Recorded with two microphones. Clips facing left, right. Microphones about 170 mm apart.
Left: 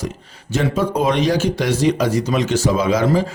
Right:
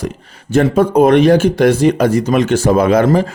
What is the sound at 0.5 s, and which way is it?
Speech, 55° right (ahead or behind).